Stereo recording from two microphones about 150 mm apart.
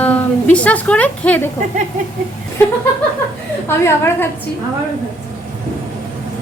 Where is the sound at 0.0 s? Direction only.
10° left (ahead or behind).